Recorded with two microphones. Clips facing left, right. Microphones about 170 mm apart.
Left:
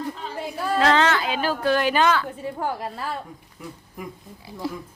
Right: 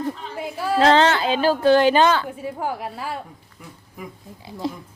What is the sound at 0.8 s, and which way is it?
A woman's voice, 30° right (ahead or behind).